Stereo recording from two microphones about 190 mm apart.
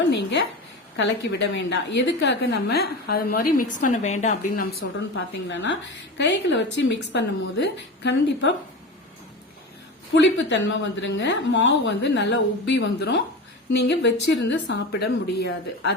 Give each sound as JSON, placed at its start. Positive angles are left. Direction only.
{"t": 0.1, "sound": "a woman's voice", "side_deg": 65}
{"t": 4.8, "sound": "a woman's voice", "side_deg": 70}
{"t": 10.2, "sound": "a woman's voice", "side_deg": 75}